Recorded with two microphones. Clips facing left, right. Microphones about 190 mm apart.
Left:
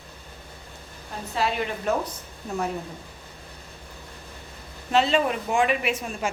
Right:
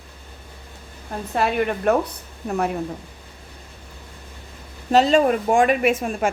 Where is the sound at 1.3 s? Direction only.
55° right (ahead or behind).